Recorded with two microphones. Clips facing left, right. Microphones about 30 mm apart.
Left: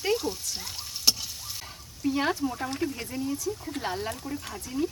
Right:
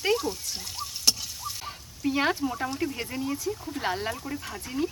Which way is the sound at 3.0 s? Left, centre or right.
Right.